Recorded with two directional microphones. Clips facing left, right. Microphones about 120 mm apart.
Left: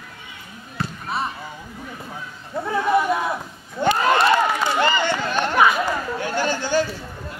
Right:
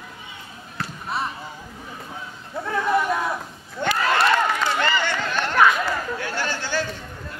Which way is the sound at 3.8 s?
25° left (ahead or behind).